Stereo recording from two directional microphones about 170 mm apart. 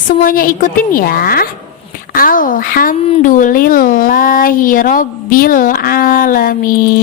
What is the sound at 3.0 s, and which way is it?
A woman's voice, 40° left (ahead or behind).